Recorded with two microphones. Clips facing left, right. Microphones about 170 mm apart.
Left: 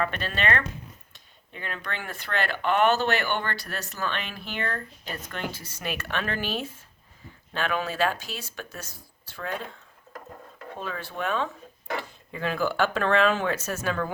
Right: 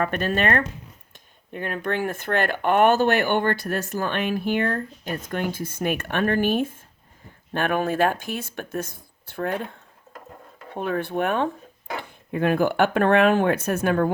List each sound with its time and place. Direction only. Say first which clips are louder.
0.0 s speech: right 5 dB; 50° right (ahead or behind)
10.8 s speech: right 9 dB; 55° right (ahead or behind)